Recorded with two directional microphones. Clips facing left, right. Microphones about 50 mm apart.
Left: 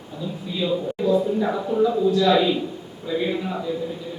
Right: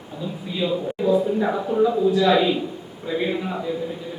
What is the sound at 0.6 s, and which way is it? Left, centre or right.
Speech, right.